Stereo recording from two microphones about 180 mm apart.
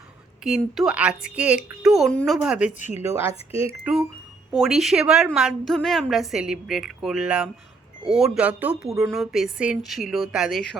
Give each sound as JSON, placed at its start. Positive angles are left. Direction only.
{"t": 0.4, "sound": "a woman's voice", "side_deg": -5}
{"t": 2.7, "sound": "speech", "side_deg": 45}
{"t": 3.7, "sound": "a woman's voice", "side_deg": -5}